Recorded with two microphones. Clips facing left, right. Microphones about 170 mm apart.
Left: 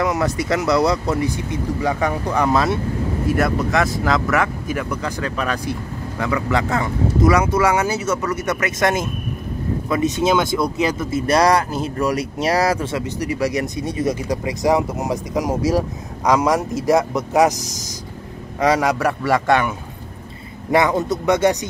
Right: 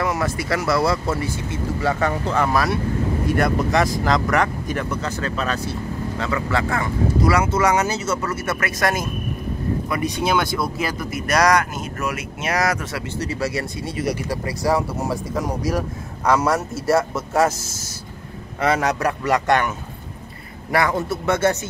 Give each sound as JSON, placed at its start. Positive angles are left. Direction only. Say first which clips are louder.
{"t": 0.0, "sound": "speech", "louder": "left 3 dB", "side_deg": 20}
{"t": 3.3, "sound": "speech", "louder": "left 1 dB", "side_deg": 0}
{"t": 13.2, "sound": "speech", "louder": "left 3 dB", "side_deg": 15}
{"t": 20.7, "sound": "speech", "louder": "left 4 dB", "side_deg": 20}